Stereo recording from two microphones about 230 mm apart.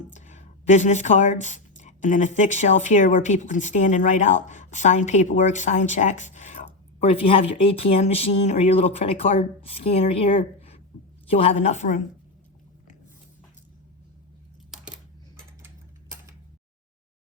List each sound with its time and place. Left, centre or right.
0.1 s a woman's voice: left